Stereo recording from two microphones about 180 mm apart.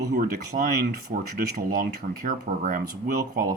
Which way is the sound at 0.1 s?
45° right (ahead or behind).